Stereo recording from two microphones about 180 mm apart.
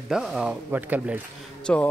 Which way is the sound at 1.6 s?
5° left (ahead or behind).